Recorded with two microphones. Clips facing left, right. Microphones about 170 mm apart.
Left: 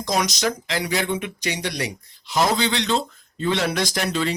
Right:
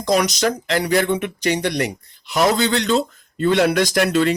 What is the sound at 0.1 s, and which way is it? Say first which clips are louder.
Speech: right 5 dB; 65° right (ahead or behind).